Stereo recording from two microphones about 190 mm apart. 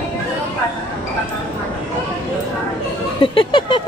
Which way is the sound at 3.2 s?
25° left (ahead or behind).